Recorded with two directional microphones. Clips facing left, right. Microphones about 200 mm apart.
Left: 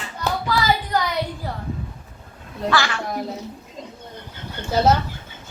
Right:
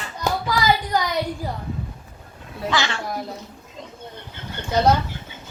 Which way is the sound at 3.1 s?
Centre (ahead or behind).